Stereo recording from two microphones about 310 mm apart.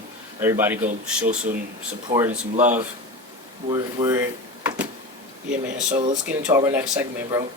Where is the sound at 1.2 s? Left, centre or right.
Right.